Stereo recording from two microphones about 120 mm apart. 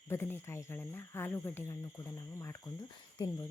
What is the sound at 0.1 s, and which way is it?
Speech, 20° left (ahead or behind).